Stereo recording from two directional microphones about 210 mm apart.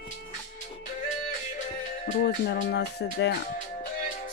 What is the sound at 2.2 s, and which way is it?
Speech, 50° left (ahead or behind).